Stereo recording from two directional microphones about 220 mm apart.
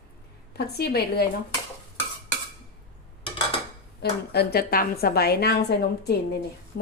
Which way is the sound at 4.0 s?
45° left (ahead or behind).